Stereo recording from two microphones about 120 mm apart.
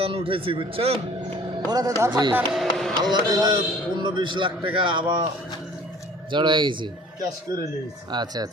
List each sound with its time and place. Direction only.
0.0 s speech: 50° right (ahead or behind)
1.7 s a man's voice: 30° right (ahead or behind)
2.5 s music: centre (ahead or behind)
3.0 s a man's voice: 35° right (ahead or behind)
6.3 s a man's voice: 40° right (ahead or behind)
8.1 s a man's voice: 35° right (ahead or behind)